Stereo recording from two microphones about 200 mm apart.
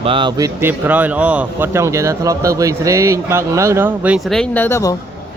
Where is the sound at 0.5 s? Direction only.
10° right (ahead or behind); by 4.9 s 15° left (ahead or behind).